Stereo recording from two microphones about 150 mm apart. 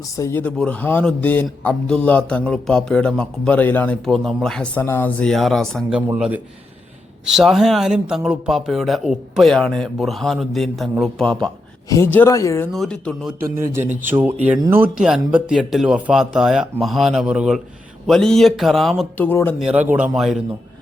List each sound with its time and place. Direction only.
0.2 s a man's voice: 15° left (ahead or behind)
11.9 s speech: 15° left (ahead or behind)
12.7 s speech: 5° left (ahead or behind)
13.4 s a man's voice: 15° right (ahead or behind); by 19.0 s centre (ahead or behind)
19.1 s a man's voice: 15° left (ahead or behind)
19.5 s speech: 5° right (ahead or behind)